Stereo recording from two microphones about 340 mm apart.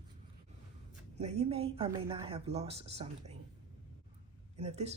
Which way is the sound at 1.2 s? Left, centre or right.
Centre.